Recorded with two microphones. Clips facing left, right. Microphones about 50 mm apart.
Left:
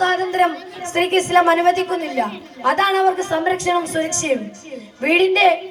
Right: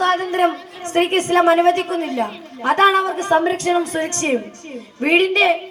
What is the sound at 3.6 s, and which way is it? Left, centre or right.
Speech, right.